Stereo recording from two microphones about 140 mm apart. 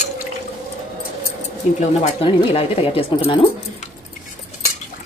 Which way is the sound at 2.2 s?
40° left (ahead or behind).